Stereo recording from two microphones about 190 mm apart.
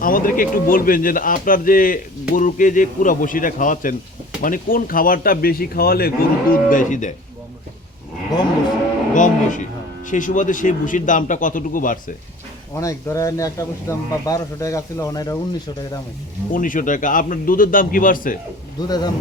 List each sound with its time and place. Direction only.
0.0 s a man's voice: 50° left (ahead or behind)
9.1 s a man's voice: 40° left (ahead or behind)
12.7 s a man's voice: 15° left (ahead or behind)
16.5 s a man's voice: 45° left (ahead or behind)
18.9 s speech: 20° left (ahead or behind)